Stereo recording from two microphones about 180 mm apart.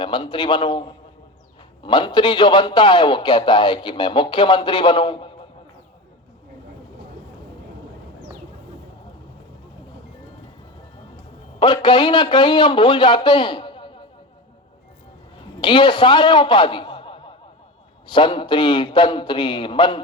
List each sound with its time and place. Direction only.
0.0 s a man's voice: 25° left (ahead or behind)
11.6 s a man's voice: 25° left (ahead or behind)
15.6 s a man's voice: 25° left (ahead or behind)